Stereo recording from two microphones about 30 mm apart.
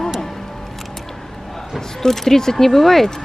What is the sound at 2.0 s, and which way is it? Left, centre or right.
Speech, centre.